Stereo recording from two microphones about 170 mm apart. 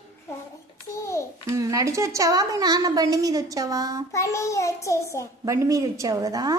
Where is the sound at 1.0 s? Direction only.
15° left (ahead or behind).